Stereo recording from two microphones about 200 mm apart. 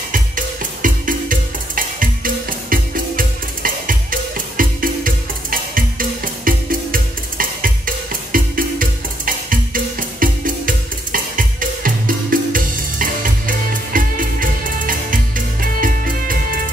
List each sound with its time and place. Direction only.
0.8 s music: 45° right (ahead or behind)